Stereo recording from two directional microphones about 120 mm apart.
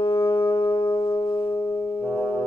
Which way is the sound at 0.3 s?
45° left (ahead or behind).